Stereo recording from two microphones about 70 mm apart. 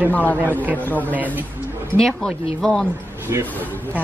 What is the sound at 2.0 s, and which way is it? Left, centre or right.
Speech, centre.